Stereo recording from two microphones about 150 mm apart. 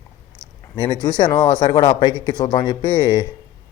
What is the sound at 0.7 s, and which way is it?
Speech, 30° left (ahead or behind).